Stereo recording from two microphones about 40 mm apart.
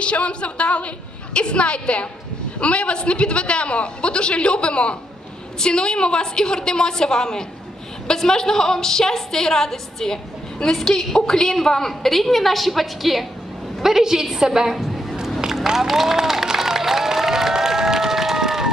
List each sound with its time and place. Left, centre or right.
0.0 s a man's voice: left; by 15.0 s centre
15.4 s run: centre